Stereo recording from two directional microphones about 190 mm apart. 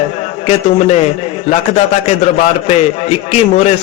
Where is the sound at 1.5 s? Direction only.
35° left (ahead or behind).